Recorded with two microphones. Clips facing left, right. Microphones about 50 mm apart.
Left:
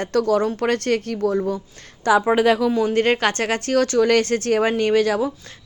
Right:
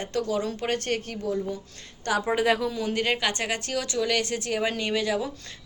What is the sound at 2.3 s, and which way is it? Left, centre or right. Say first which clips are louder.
Speech: left 7 dB; left.